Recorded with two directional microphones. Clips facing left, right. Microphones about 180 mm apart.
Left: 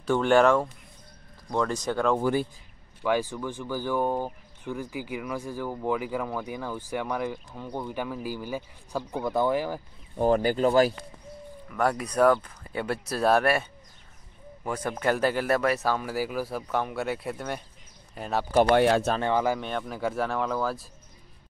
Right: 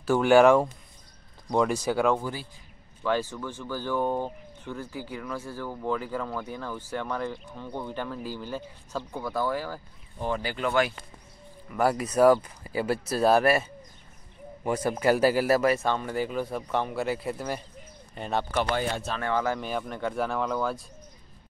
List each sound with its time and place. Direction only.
0.0 s speech: 5° right (ahead or behind)
3.0 s speech: 15° left (ahead or behind)
10.2 s speech: 45° left (ahead or behind)
11.7 s speech: 5° right (ahead or behind)
18.7 s speech: 70° left (ahead or behind)
19.2 s speech: 15° left (ahead or behind)
19.6 s speech: centre (ahead or behind)